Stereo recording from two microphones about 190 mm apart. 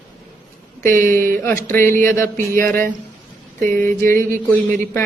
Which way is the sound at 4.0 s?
15° left (ahead or behind).